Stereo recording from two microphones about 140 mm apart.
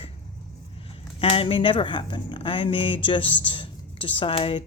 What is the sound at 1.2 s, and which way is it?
Speech, 40° left (ahead or behind).